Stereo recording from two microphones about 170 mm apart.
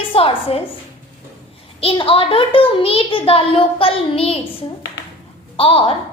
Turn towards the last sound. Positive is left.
turn(degrees=35)  # may be behind; listen again after turning